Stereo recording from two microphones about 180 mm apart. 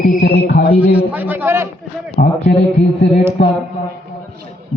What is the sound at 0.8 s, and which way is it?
Speech, 10° right (ahead or behind).